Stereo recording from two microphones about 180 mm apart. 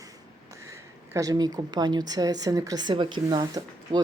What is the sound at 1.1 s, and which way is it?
A woman's voice, 20° right (ahead or behind).